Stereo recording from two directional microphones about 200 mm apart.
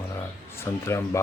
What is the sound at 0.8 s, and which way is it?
Speech, 15° left (ahead or behind).